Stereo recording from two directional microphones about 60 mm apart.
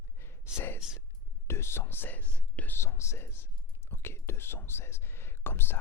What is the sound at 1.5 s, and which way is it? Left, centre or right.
Speech, left.